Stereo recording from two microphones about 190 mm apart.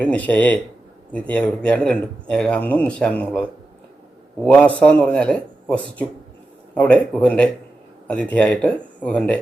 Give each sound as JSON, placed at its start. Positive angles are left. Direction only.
{"t": 0.0, "sound": "speech", "side_deg": 10}
{"t": 4.4, "sound": "speech", "side_deg": 5}